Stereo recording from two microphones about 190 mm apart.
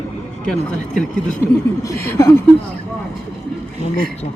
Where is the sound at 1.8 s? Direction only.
15° left (ahead or behind).